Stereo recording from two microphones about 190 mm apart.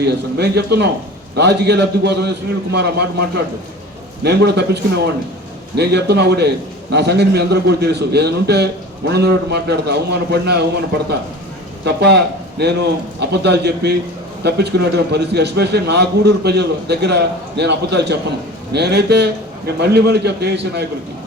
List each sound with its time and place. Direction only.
0.0 s a man's voice: 60° right (ahead or behind)